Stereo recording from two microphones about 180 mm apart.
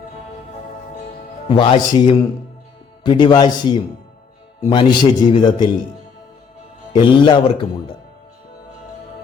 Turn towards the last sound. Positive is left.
turn(degrees=25)  # may be behind; listen again after turning